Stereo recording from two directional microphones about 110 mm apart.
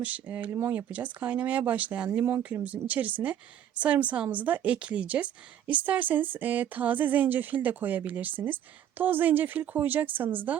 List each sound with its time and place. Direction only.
0.0 s speech: 15° right (ahead or behind)
2.0 s speech: 25° right (ahead or behind)